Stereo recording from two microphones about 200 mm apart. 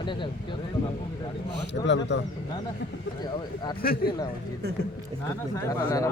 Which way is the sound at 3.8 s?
50° left (ahead or behind).